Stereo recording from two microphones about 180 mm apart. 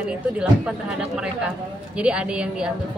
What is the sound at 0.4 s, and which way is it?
A woman's voice, 5° right (ahead or behind).